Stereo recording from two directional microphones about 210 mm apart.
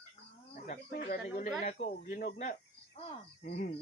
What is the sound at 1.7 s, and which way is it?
Speech, 40° left (ahead or behind).